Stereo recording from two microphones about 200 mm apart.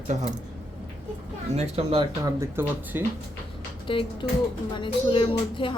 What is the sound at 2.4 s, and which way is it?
Speech, 10° right (ahead or behind).